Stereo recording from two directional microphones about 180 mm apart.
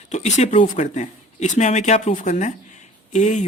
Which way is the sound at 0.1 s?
40° left (ahead or behind).